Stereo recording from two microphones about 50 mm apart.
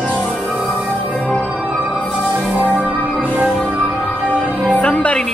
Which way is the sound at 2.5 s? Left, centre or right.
Right.